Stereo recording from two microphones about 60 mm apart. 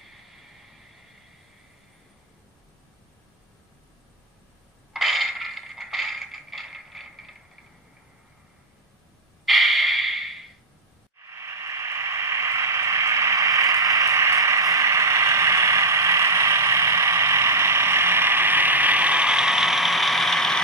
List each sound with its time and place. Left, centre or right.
4.9 s coin: centre
5.4 s mechanisms: centre
9.5 s snort: centre
11.2 s a sound: right; by 20.6 s centre